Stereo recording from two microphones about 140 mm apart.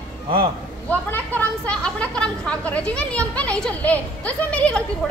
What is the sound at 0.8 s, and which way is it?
Speech, 10° left (ahead or behind).